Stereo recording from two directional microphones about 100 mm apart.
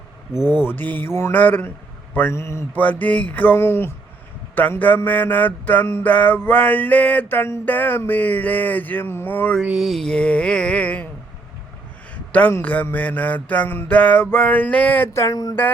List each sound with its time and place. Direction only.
0.7 s speech: 20° left (ahead or behind)
2.7 s mantra: 15° left (ahead or behind)
9.6 s mantra: 5° right (ahead or behind); by 11.1 s 15° left (ahead or behind)
12.1 s a sound: 15° left (ahead or behind)
12.6 s mantra: 15° left (ahead or behind)
15.1 s a sound: 35° left (ahead or behind)